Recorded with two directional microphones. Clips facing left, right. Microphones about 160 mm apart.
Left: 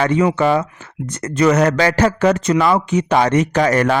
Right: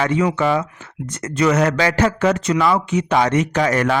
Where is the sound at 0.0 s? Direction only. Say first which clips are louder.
Left 3 dB; 40° left (ahead or behind).